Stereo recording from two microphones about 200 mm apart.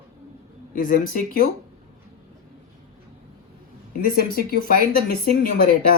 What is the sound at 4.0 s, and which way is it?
Speech, 45° left (ahead or behind).